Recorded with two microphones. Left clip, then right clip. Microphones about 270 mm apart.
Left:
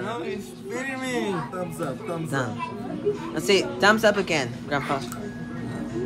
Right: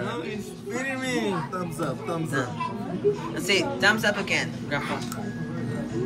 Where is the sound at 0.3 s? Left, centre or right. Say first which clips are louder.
Left 1 dB; left.